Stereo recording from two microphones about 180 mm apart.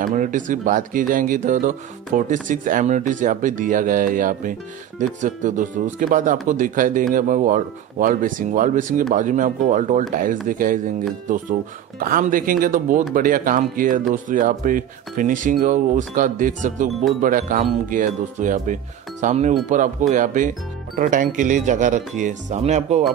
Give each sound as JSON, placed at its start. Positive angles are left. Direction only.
{"t": 0.0, "sound": "speech", "side_deg": -45}
{"t": 12.1, "sound": "speech", "side_deg": -50}